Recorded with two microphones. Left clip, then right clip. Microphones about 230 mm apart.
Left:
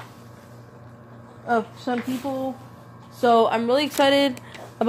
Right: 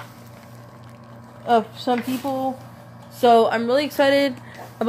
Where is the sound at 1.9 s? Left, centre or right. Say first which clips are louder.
Right 5 dB; centre.